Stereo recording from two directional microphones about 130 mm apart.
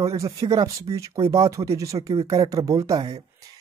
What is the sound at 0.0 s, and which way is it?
Speech, 25° right (ahead or behind).